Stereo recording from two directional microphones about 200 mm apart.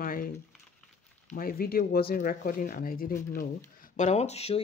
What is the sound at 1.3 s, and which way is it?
Speech, 45° left (ahead or behind).